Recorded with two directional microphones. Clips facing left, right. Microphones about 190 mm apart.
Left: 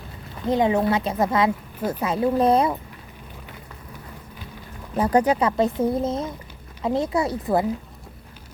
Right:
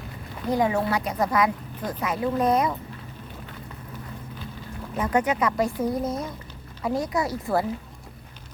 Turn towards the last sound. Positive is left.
turn(degrees=20)  # may be behind; listen again after turning